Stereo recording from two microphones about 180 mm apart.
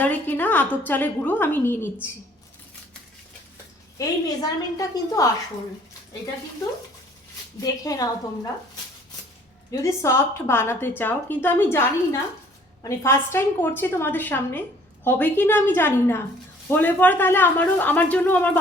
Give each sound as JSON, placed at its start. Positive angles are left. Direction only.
{"t": 0.0, "sound": "a woman's voice", "side_deg": 10}
{"t": 3.9, "sound": "a woman's voice", "side_deg": 20}
{"t": 7.6, "sound": "a woman's voice", "side_deg": 20}
{"t": 9.8, "sound": "a man's voice", "side_deg": 15}